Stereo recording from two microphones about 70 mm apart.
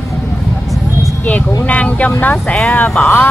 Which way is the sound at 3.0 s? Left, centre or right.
Left.